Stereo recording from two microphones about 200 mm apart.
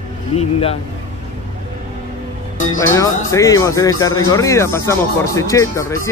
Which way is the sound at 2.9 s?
15° left (ahead or behind).